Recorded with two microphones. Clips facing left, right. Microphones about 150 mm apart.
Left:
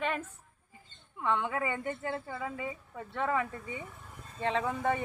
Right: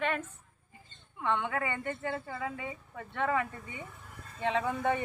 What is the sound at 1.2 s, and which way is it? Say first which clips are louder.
A woman's voice: left 1 dB; centre (ahead or behind).